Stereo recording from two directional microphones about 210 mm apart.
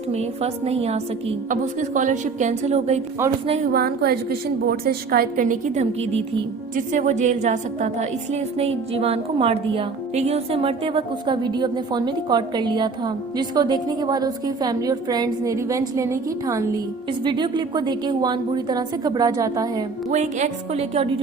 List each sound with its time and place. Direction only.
0.1 s a woman's voice: 30° right (ahead or behind)
3.7 s a woman's voice: 45° right (ahead or behind); by 19.8 s 15° right (ahead or behind)
20.1 s a woman's voice: 35° right (ahead or behind)